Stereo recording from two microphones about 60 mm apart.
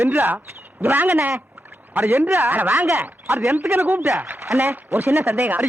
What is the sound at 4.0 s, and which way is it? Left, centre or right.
Speech, right.